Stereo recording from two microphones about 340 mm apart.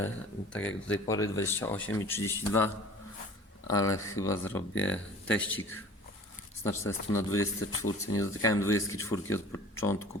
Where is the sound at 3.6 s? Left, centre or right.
Centre.